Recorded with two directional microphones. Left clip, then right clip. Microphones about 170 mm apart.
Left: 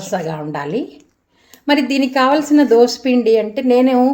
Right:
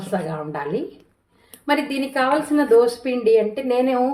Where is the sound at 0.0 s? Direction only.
45° left (ahead or behind).